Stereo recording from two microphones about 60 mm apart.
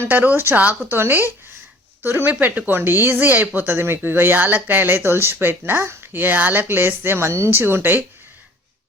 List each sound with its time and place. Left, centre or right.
0.0 s speech: right
3.8 s speech: right
6.1 s speech: right